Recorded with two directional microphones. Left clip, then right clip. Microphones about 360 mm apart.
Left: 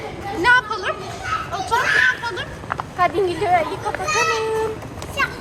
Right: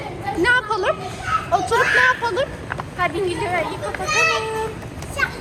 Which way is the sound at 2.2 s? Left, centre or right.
Centre.